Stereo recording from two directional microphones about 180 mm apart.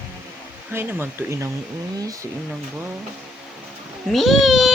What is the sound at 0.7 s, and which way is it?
Speech, 10° right (ahead or behind).